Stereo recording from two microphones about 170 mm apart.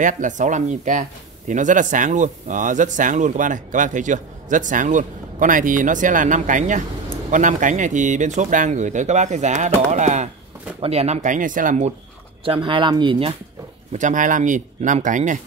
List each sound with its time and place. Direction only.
0.0 s speech: 50° right (ahead or behind)
12.4 s speech: 30° right (ahead or behind)
13.9 s speech: 50° right (ahead or behind)